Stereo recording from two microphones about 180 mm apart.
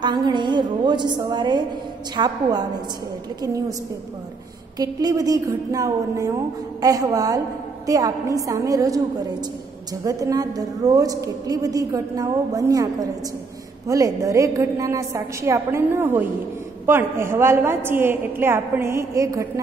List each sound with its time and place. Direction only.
0.0 s a woman's voice: 25° right (ahead or behind)
4.7 s a woman's voice: 20° right (ahead or behind)
10.0 s a woman's voice: 20° right (ahead or behind)